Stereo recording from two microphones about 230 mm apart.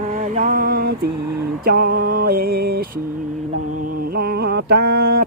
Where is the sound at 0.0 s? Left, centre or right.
Right.